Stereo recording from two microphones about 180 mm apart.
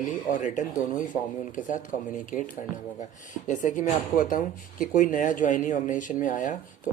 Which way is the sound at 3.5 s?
45° left (ahead or behind).